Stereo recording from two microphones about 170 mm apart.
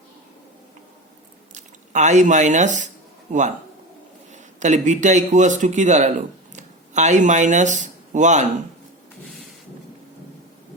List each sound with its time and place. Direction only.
1.5 s speech: 45° right (ahead or behind)
4.3 s speech: 45° right (ahead or behind)